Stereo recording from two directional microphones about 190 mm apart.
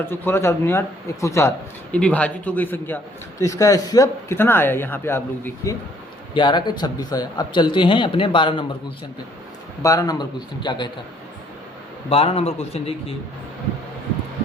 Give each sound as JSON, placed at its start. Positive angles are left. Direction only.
{"t": 0.0, "sound": "speech", "side_deg": 10}
{"t": 6.3, "sound": "speech", "side_deg": 25}
{"t": 9.8, "sound": "speech", "side_deg": 15}
{"t": 12.0, "sound": "a man's voice", "side_deg": 30}